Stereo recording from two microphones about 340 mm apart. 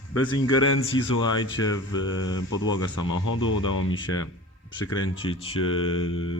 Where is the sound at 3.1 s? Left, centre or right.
Left.